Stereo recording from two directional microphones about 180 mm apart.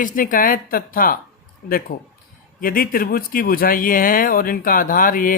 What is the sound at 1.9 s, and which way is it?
Speech, 65° left (ahead or behind).